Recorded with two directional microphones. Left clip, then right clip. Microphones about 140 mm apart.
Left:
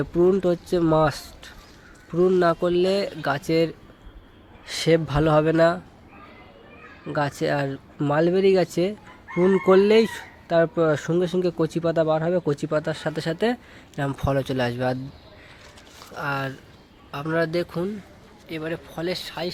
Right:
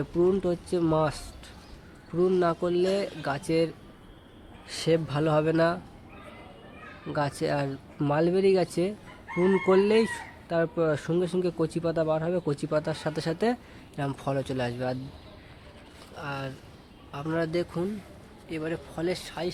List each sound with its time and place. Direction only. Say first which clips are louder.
0.0 s speech: left 5 dB; 35° left (ahead or behind)
7.1 s speech: left 4 dB; 25° left (ahead or behind)
14.0 s speech: left 6 dB; 30° left (ahead or behind)
16.1 s speech: left 8 dB; 65° left (ahead or behind)
17.1 s speech: left 5 dB; 45° left (ahead or behind)